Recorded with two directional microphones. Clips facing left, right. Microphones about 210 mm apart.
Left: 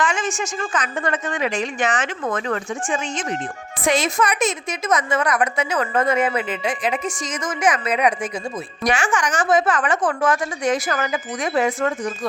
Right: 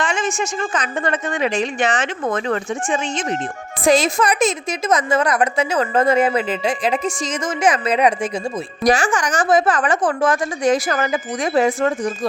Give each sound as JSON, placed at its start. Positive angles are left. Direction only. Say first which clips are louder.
{"t": 0.0, "sound": "a woman's voice", "louder": "right 2 dB", "side_deg": -25}